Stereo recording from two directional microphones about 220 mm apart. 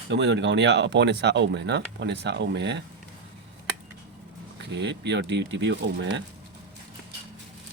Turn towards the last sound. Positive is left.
turn(degrees=-55)  # may be behind; listen again after turning